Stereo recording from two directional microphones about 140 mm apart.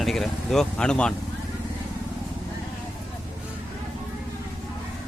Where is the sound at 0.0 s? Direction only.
Centre (ahead or behind).